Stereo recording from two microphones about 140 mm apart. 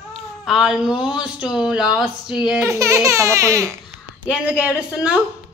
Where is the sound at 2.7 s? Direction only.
20° right (ahead or behind).